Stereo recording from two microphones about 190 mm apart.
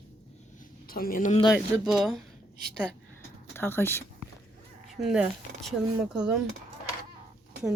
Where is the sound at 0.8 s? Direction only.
50° left (ahead or behind).